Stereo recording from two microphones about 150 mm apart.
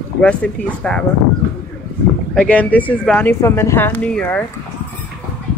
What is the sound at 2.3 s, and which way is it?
Speech, 10° left (ahead or behind).